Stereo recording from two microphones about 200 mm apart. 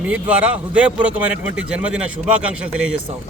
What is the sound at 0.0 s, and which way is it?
A man's voice, 5° right (ahead or behind).